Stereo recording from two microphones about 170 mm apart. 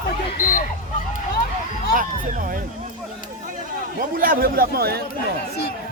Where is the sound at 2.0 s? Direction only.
55° right (ahead or behind).